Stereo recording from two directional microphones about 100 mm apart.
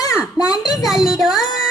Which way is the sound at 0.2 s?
5° right (ahead or behind).